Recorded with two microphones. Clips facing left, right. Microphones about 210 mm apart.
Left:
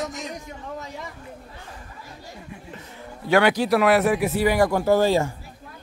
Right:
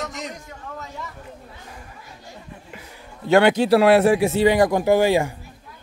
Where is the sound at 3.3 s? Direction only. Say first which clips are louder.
Right 4 dB; 25° right (ahead or behind).